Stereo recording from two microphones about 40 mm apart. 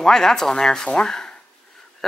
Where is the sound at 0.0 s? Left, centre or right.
Centre.